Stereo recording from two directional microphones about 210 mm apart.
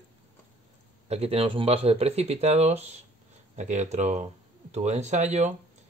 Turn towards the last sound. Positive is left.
turn(degrees=-35)  # may be behind; listen again after turning